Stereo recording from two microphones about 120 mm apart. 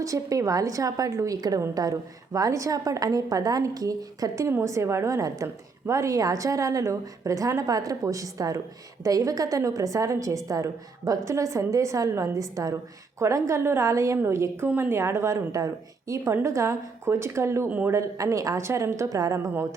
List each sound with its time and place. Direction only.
0.0 s a woman's voice: 30° right (ahead or behind)
17.7 s a man's voice: 10° right (ahead or behind)
17.9 s a woman's voice: 25° right (ahead or behind)